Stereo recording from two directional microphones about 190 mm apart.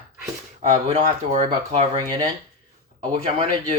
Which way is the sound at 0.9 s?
35° right (ahead or behind).